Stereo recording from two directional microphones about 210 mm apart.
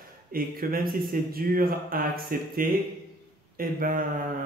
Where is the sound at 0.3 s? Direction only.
45° right (ahead or behind).